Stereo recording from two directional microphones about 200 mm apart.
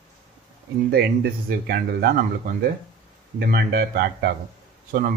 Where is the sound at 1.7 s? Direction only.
50° right (ahead or behind).